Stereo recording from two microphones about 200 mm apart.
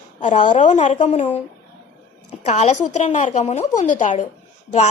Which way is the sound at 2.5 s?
35° left (ahead or behind).